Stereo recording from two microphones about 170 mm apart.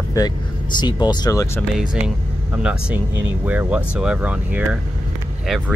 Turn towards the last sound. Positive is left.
turn(degrees=-5)  # may be behind; listen again after turning